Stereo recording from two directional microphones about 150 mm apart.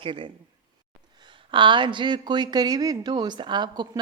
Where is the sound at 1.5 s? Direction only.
30° right (ahead or behind).